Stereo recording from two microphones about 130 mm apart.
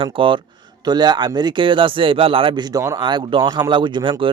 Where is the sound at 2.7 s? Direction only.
25° right (ahead or behind).